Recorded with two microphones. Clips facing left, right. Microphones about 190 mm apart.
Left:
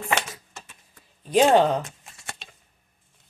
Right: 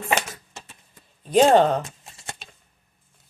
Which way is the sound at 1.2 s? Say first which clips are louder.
Right 2 dB; 5° left (ahead or behind).